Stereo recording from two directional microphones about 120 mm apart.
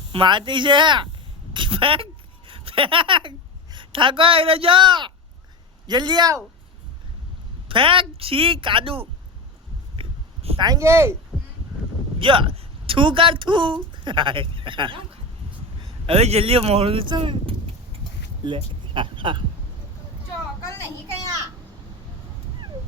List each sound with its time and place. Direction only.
0.1 s a woman's voice: 40° right (ahead or behind)
7.7 s speech: 45° right (ahead or behind)
10.0 s a sound: 55° right (ahead or behind)
10.6 s speech: 35° right (ahead or behind)
10.8 s speech: 20° right (ahead or behind)
12.2 s speech: 45° right (ahead or behind)
16.0 s speech: 60° right (ahead or behind); by 19.4 s 45° right (ahead or behind)